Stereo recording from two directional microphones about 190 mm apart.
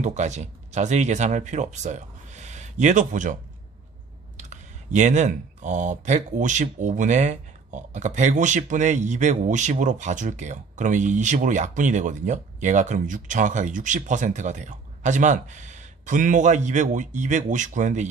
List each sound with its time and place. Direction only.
0.0 s speech: 40° right (ahead or behind)
4.4 s speech: 40° right (ahead or behind)